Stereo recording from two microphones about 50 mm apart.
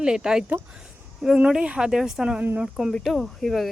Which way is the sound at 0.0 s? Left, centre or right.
Centre.